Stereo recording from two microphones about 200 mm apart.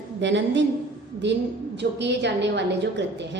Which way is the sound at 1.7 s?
60° right (ahead or behind).